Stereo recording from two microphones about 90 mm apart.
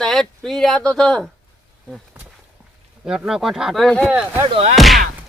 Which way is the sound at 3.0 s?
5° right (ahead or behind).